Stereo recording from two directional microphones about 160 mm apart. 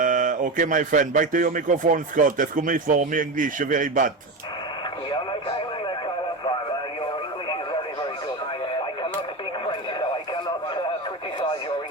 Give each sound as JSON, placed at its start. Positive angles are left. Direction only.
{"t": 0.0, "sound": "speech", "side_deg": -55}